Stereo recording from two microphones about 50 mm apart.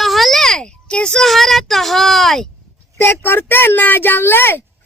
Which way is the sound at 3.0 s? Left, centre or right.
Left.